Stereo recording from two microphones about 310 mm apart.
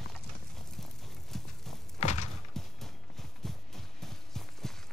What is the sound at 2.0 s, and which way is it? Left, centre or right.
Music, left.